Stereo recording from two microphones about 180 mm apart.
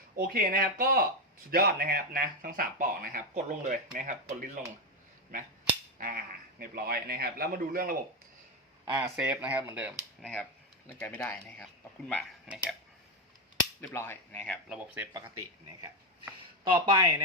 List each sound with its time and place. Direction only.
0.2 s a man's voice: 55° right (ahead or behind)
6.0 s a man's voice: 55° right (ahead or behind)
8.8 s speech: 20° right (ahead or behind)
11.0 s speech: 10° left (ahead or behind)
13.8 s speech: 10° left (ahead or behind)
14.7 s speech: 10° right (ahead or behind)
16.4 s speech: 20° right (ahead or behind)